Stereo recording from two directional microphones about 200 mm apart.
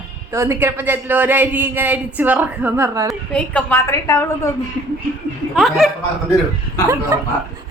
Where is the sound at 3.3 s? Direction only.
5° left (ahead or behind).